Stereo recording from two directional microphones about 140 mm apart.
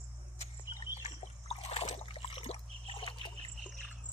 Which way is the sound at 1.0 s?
50° left (ahead or behind).